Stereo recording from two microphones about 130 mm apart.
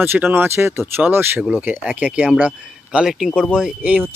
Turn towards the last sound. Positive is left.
turn(degrees=-10)  # may be behind; listen again after turning